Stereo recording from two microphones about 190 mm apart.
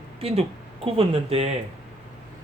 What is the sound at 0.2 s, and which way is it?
Speech, 30° right (ahead or behind).